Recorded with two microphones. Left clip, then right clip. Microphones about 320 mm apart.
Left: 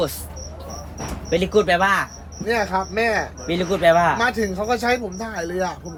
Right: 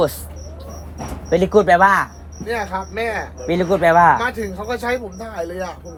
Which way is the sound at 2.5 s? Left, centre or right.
Left.